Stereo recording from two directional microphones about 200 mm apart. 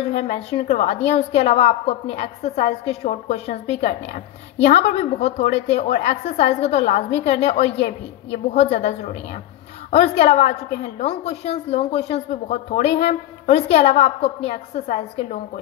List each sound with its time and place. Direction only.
0.0 s speech: 35° left (ahead or behind)